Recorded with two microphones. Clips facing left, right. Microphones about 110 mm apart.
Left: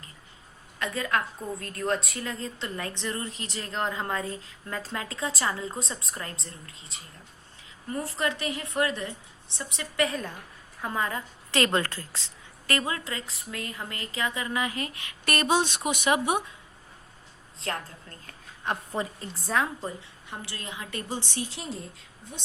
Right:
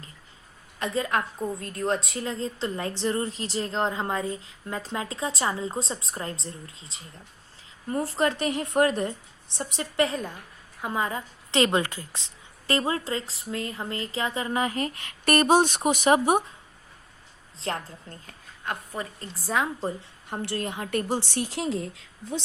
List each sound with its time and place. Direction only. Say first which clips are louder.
0.8 s a woman's voice: right 2 dB; 25° right (ahead or behind)
7.9 s a woman's voice: right 4 dB; 40° right (ahead or behind)
9.6 s a woman's voice: right 3 dB; 35° right (ahead or behind)
10.8 s a woman's voice: right 2 dB; 15° right (ahead or behind); by 16.4 s 40° right (ahead or behind)
17.6 s a woman's voice: right 2 dB; 25° right (ahead or behind)
18.6 s a woman's voice: left 2 dB; 20° left (ahead or behind)
19.3 s a woman's voice: right 2 dB; 10° right (ahead or behind)
20.4 s a woman's voice: right 11 dB; 55° right (ahead or behind); by 22.4 s 90° right